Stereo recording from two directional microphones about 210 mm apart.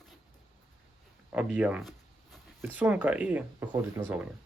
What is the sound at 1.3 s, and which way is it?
Speech, 5° right (ahead or behind).